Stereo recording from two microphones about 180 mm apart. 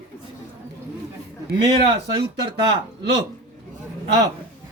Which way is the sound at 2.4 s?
25° right (ahead or behind).